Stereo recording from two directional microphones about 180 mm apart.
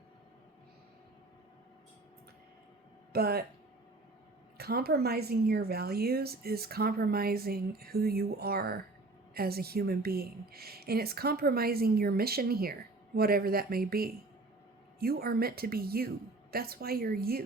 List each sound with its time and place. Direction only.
3.1 s speech: 60° right (ahead or behind)
4.5 s a woman's voice: 60° right (ahead or behind)